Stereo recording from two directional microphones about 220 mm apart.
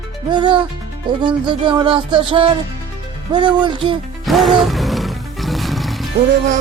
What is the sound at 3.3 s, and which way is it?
Speech, 20° right (ahead or behind).